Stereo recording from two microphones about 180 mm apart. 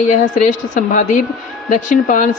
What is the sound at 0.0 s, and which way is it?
Speech, 45° left (ahead or behind).